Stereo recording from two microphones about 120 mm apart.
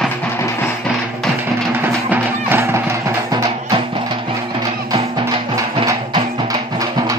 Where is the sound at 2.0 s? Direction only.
20° right (ahead or behind).